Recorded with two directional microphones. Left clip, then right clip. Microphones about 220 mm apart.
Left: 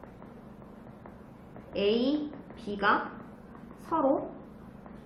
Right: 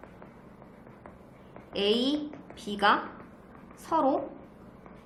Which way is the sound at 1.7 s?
40° right (ahead or behind).